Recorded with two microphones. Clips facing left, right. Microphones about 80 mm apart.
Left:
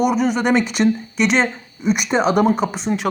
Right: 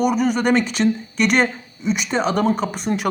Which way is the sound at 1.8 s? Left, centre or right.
Centre.